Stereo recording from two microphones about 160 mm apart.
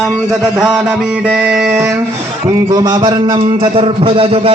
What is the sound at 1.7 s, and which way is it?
Speech, 15° right (ahead or behind).